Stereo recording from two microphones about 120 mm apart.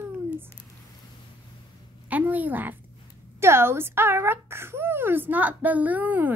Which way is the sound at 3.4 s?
20° right (ahead or behind).